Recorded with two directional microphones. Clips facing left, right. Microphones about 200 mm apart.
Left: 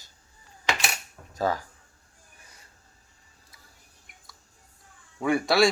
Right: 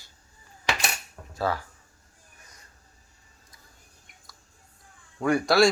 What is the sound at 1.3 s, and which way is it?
Speech, 40° left (ahead or behind).